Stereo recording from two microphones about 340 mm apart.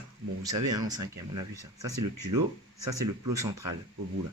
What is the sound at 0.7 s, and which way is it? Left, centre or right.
Speech, centre.